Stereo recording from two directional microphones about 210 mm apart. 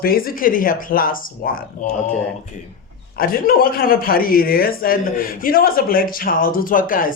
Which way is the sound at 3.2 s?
45° left (ahead or behind).